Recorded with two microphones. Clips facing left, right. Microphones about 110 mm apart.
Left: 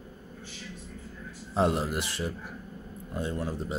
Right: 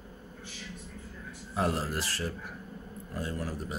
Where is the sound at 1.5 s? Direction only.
20° left (ahead or behind).